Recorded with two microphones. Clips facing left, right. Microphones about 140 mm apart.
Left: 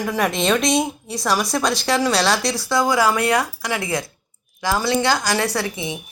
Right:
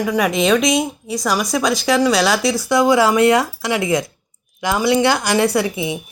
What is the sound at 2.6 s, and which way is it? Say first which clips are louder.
Speech: right 4 dB; 20° right (ahead or behind).